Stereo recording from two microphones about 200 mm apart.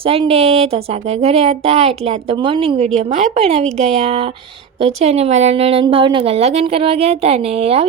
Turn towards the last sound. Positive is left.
turn(degrees=-30)  # may be behind; listen again after turning